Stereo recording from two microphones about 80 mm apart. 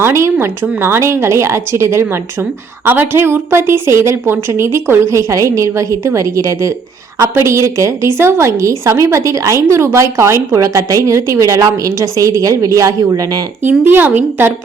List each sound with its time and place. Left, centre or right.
0.0 s a woman's voice: right
13.6 s a woman's voice: right